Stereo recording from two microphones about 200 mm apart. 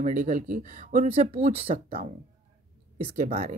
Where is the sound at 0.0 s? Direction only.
40° right (ahead or behind).